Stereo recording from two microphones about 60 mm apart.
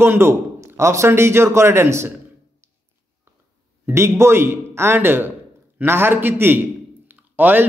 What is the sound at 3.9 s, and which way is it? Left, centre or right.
A man's voice, right.